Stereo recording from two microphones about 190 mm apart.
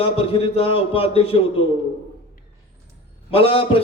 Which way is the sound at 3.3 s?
30° left (ahead or behind).